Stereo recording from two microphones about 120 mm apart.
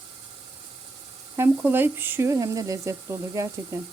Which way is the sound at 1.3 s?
20° right (ahead or behind).